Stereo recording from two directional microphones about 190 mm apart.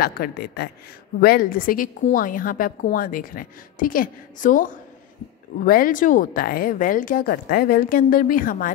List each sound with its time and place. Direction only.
0.0 s a woman's voice: 50° left (ahead or behind)